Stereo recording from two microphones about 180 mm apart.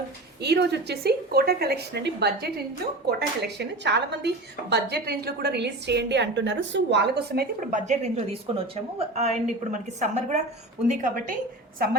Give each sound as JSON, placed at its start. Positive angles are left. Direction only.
{"t": 0.4, "sound": "a woman's voice", "side_deg": -70}
{"t": 7.7, "sound": "a woman's voice", "side_deg": -45}
{"t": 11.8, "sound": "a woman's voice", "side_deg": -60}